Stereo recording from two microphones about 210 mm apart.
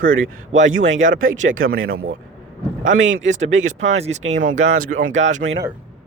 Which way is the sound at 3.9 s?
30° right (ahead or behind).